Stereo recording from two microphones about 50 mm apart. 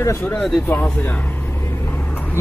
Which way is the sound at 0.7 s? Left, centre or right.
Left.